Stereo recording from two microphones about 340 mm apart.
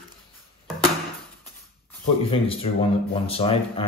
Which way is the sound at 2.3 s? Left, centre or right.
Centre.